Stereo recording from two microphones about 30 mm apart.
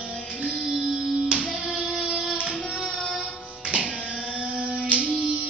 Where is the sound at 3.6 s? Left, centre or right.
Right.